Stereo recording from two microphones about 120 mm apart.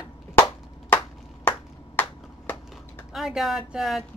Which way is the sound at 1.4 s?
15° left (ahead or behind).